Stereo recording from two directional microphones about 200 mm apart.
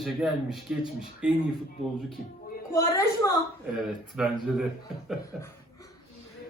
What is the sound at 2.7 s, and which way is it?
Speech, 15° left (ahead or behind).